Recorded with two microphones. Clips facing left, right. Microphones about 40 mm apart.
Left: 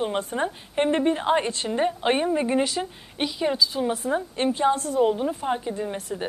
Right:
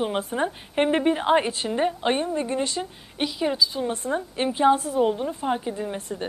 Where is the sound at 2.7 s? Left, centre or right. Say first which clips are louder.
Even; centre.